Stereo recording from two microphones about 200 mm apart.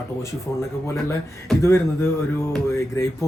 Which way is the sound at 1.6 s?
15° left (ahead or behind).